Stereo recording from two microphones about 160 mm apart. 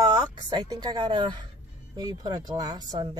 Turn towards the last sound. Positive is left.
turn(degrees=-25)  # may be behind; listen again after turning